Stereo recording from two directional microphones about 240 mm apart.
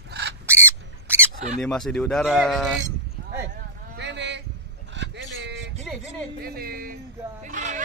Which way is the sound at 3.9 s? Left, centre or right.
Right.